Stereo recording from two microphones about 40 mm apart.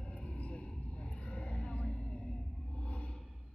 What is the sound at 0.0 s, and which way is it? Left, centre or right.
Vehicle, left.